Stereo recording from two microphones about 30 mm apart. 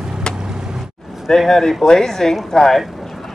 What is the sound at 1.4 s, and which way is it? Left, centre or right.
Speech, centre.